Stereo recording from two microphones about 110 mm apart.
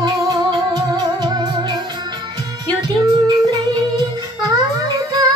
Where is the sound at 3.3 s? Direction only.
35° right (ahead or behind).